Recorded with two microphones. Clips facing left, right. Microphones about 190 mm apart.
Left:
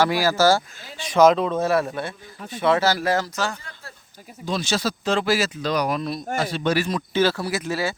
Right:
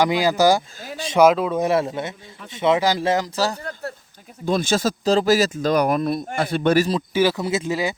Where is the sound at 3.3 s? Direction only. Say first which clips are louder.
Right 4 dB; 35° right (ahead or behind).